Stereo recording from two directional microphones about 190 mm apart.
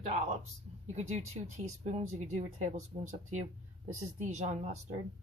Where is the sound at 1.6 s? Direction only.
35° right (ahead or behind).